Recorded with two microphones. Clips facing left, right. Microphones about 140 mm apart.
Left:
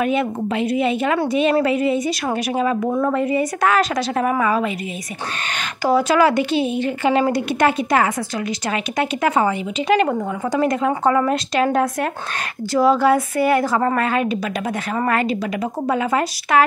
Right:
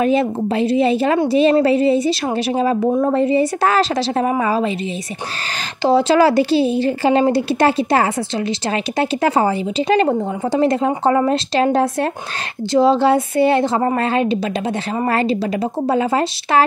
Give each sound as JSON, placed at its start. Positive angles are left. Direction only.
{"t": 0.0, "sound": "a woman's voice", "side_deg": -35}
{"t": 5.8, "sound": "a woman's voice", "side_deg": -30}